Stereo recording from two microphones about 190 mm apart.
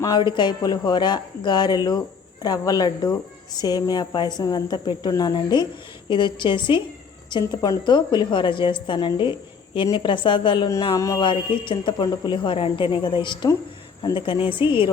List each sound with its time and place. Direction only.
0.0 s a woman's voice: 20° left (ahead or behind)